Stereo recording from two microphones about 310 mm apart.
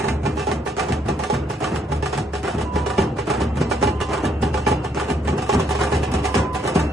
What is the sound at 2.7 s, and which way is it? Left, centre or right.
Music, centre.